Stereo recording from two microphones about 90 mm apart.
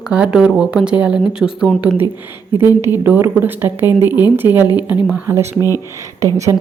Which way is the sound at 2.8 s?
25° right (ahead or behind).